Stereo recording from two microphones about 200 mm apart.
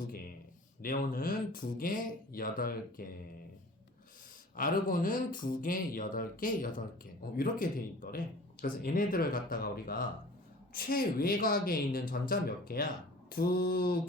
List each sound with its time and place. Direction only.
0.8 s speech: 45° left (ahead or behind)
4.5 s speech: 45° left (ahead or behind)